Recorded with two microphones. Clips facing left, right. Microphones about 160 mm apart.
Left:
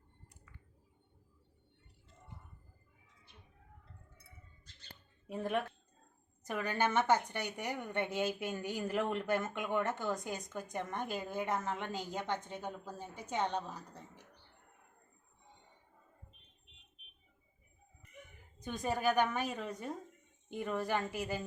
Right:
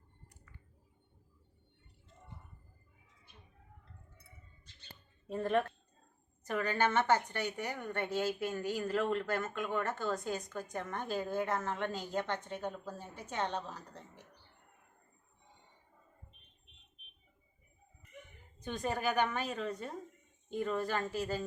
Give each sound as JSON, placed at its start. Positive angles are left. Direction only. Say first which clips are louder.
{"t": 5.3, "sound": "a woman's voice", "louder": "right 4 dB", "side_deg": 10}
{"t": 18.6, "sound": "a woman's voice", "louder": "left 1 dB", "side_deg": 10}